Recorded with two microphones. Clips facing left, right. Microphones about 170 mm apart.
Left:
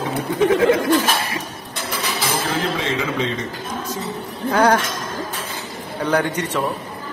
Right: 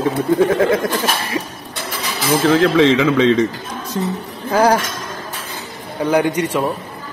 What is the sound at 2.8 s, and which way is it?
Speech, 90° right.